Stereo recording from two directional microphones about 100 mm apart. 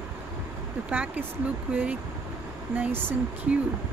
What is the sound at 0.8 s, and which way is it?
Speech, 15° right (ahead or behind).